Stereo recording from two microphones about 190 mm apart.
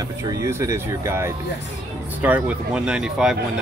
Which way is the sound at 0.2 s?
15° right (ahead or behind).